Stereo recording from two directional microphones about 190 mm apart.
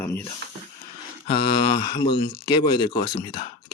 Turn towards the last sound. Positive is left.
turn(degrees=25)  # may be behind; listen again after turning